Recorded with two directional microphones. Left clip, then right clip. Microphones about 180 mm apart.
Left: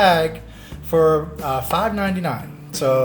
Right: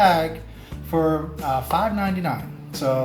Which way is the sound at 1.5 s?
55° left (ahead or behind).